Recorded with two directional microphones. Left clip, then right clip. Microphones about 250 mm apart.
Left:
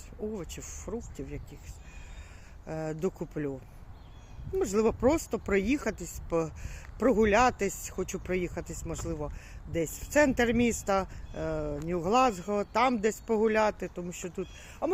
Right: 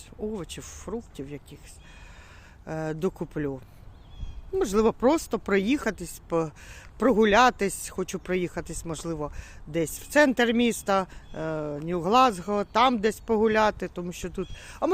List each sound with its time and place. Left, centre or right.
0.3 s speech: centre
2.6 s speech: centre